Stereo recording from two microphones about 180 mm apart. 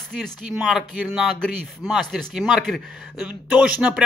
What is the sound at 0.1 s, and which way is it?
Speech, centre (ahead or behind).